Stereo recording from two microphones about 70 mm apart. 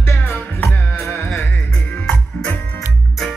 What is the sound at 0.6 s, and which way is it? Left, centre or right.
Music, centre.